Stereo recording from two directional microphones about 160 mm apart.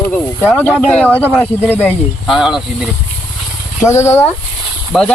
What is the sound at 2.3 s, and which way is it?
Speech, 5° right (ahead or behind).